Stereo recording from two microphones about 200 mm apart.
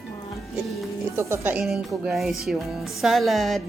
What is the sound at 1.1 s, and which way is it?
Music, 15° right (ahead or behind).